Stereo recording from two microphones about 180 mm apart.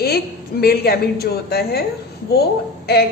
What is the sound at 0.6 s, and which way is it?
A woman's voice, 60° left (ahead or behind).